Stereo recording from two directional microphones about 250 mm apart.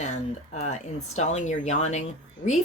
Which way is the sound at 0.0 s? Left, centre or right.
Left.